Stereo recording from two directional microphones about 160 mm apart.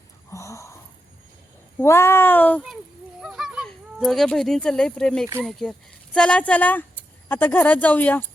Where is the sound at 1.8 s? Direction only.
15° left (ahead or behind).